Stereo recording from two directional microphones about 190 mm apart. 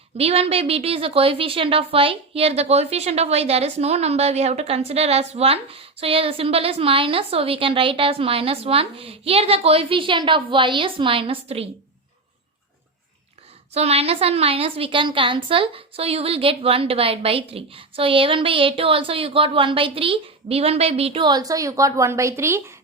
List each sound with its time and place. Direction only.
0.2 s a woman's voice: 30° right (ahead or behind)
13.7 s a woman's voice: 30° right (ahead or behind); by 22.6 s 15° right (ahead or behind)